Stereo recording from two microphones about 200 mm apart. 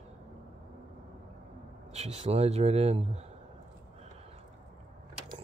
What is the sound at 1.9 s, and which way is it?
Speech, 35° right (ahead or behind).